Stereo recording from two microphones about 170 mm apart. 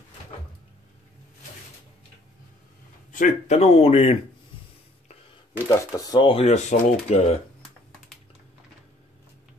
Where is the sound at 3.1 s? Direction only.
50° left (ahead or behind).